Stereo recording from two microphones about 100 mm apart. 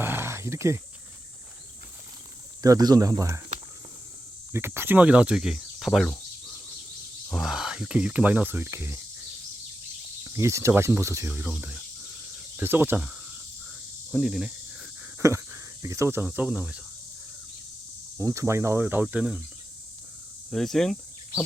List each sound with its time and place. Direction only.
0.0 s a sound: 20° right (ahead or behind)
2.6 s speech: 40° right (ahead or behind)
4.5 s speech: 25° right (ahead or behind); by 6.1 s centre (ahead or behind)
7.3 s speech: 5° right (ahead or behind); by 9.0 s 25° right (ahead or behind)
10.2 s speech: 30° right (ahead or behind)
11.3 s speech: 15° right (ahead or behind)
12.5 s speech: 20° right (ahead or behind)
14.1 s speech: 5° right (ahead or behind)
15.2 s speech: 30° right (ahead or behind); by 16.8 s 10° right (ahead or behind)
18.2 s speech: 30° right (ahead or behind)
19.0 s speech: 5° right (ahead or behind)
20.5 s speech: 5° left (ahead or behind)